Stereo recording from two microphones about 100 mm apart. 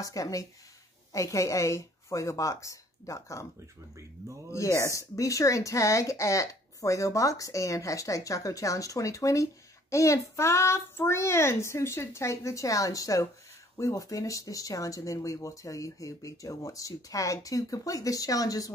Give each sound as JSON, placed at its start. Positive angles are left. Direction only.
{"t": 0.0, "sound": "speech", "side_deg": 35}
{"t": 4.5, "sound": "speech", "side_deg": 30}